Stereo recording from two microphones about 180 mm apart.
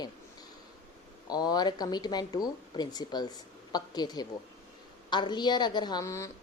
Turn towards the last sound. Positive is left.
turn(degrees=15)  # may be behind; listen again after turning